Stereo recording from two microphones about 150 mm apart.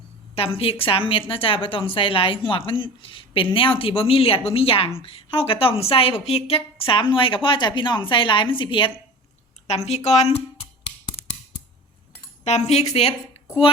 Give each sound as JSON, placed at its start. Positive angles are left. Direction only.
{"t": 0.3, "sound": "a woman's voice", "side_deg": 40}
{"t": 9.6, "sound": "speech", "side_deg": 45}
{"t": 11.2, "sound": "a sound", "side_deg": 40}
{"t": 12.5, "sound": "speech", "side_deg": 45}